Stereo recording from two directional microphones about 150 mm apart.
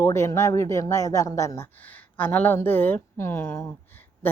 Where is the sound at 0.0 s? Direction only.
20° left (ahead or behind).